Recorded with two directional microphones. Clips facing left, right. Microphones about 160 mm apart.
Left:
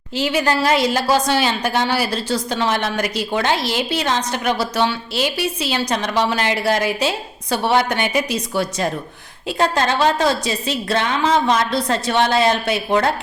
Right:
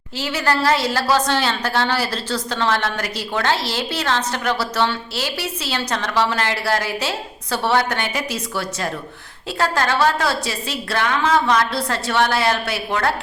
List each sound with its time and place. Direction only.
0.2 s a woman's voice: 15° left (ahead or behind)